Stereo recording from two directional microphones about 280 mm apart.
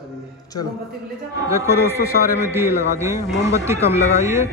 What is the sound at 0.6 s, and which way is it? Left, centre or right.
Speech, left.